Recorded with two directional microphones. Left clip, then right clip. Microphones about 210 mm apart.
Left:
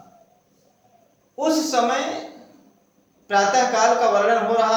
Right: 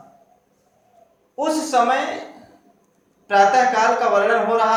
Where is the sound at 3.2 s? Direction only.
10° left (ahead or behind).